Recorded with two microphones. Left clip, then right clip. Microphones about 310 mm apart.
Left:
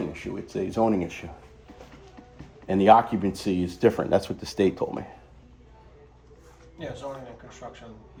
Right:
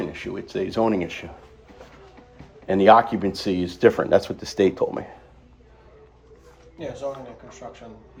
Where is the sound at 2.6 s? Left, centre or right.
Centre.